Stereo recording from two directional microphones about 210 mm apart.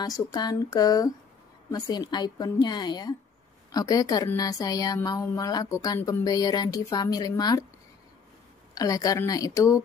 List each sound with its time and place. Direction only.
0.0 s a woman's voice: 20° left (ahead or behind)
8.7 s a woman's voice: 15° left (ahead or behind)